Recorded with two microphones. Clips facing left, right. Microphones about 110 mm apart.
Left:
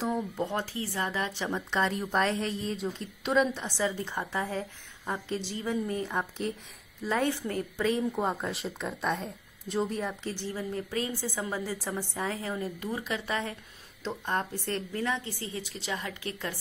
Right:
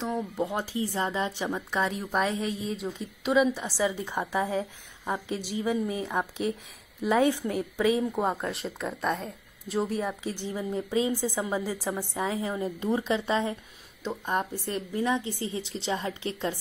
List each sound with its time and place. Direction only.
0.0 s a woman's voice: centre (ahead or behind); by 16.5 s 25° right (ahead or behind)